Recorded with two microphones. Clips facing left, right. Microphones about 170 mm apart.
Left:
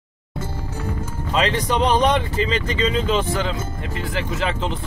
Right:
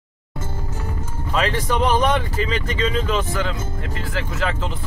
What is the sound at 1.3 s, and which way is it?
Speech, 20° left (ahead or behind).